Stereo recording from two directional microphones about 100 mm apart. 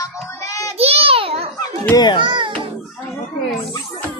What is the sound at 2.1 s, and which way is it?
Speech, 50° right (ahead or behind).